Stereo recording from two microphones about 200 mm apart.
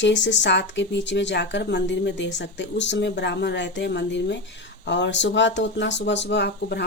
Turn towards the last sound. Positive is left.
turn(degrees=55)  # may be behind; listen again after turning